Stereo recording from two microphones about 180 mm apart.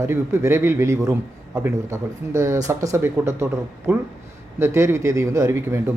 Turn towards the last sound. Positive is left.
turn(degrees=-15)  # may be behind; listen again after turning